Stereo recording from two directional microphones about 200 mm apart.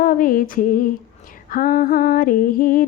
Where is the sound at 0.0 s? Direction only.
45° left (ahead or behind).